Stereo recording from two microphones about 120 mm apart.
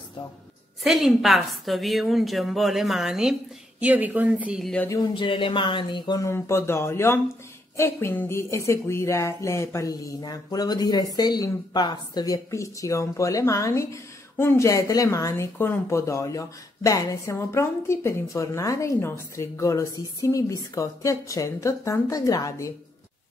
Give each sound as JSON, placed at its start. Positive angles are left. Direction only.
{"t": 0.8, "sound": "a woman's voice", "side_deg": 0}
{"t": 3.8, "sound": "a woman's voice", "side_deg": -15}
{"t": 5.1, "sound": "speech", "side_deg": 45}
{"t": 6.2, "sound": "speech", "side_deg": 25}